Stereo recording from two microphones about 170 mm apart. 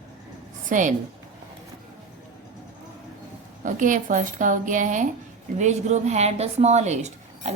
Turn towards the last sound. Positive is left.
turn(degrees=-45)  # may be behind; listen again after turning